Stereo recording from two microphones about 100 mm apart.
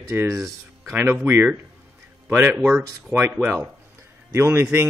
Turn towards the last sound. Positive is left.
turn(degrees=-25)  # may be behind; listen again after turning